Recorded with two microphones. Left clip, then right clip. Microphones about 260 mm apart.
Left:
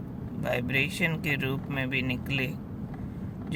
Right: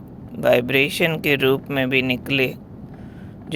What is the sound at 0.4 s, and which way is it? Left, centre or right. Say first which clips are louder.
Speech: right 12 dB; right.